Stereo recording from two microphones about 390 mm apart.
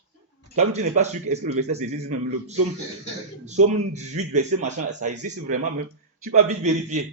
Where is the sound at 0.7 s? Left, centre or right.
Centre.